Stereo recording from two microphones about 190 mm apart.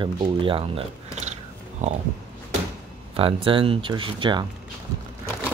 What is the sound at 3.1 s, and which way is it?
Speech, 30° right (ahead or behind).